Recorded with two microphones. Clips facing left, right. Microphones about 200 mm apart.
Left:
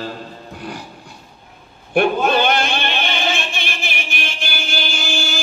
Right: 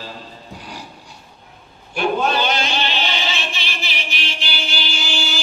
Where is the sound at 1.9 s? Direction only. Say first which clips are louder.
Left 4 dB; 55° left (ahead or behind).